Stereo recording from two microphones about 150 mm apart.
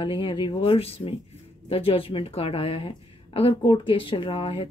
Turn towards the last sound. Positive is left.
turn(degrees=35)  # may be behind; listen again after turning